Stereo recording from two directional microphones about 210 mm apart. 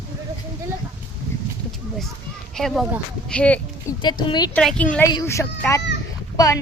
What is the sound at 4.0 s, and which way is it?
Speech, 20° left (ahead or behind).